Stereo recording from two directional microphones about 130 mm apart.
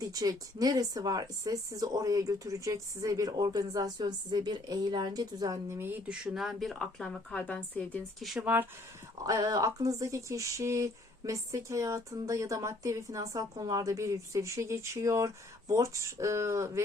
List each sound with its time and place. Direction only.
0.0 s speech: 30° right (ahead or behind)
6.2 s a woman's voice: centre (ahead or behind)
8.2 s a woman's voice: centre (ahead or behind)
9.2 s speech: 30° right (ahead or behind)